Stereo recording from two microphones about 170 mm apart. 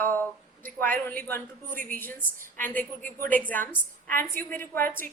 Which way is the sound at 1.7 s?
55° right (ahead or behind).